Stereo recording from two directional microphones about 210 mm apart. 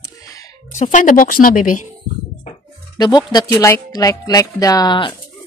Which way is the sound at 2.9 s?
20° left (ahead or behind).